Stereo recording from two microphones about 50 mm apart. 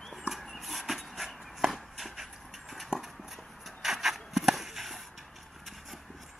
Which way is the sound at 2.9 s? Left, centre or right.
Centre.